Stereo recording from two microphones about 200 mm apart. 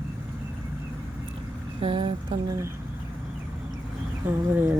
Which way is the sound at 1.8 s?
25° right (ahead or behind).